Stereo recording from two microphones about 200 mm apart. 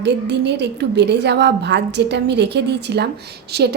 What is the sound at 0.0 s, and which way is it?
A woman's voice, 60° right (ahead or behind).